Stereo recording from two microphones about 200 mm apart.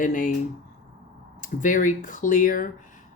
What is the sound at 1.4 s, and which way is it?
Speech, 40° left (ahead or behind).